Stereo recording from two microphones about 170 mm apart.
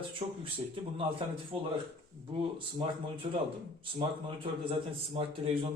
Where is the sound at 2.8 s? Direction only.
30° right (ahead or behind).